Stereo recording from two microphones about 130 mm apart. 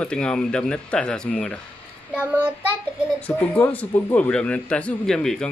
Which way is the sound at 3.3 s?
10° left (ahead or behind).